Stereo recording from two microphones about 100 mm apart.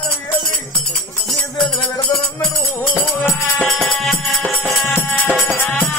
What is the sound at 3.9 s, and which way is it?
Music, centre (ahead or behind).